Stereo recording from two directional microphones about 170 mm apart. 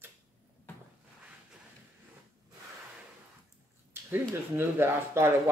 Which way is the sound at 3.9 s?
15° right (ahead or behind).